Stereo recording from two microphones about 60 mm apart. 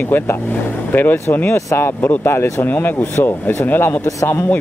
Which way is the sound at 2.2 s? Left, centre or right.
Left.